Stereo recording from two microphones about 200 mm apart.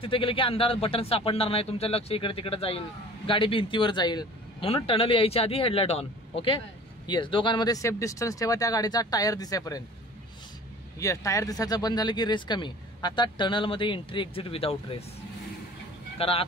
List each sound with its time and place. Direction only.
0.0 s speech: 25° left (ahead or behind)
11.0 s speech: 15° left (ahead or behind)
16.2 s speech: 30° left (ahead or behind)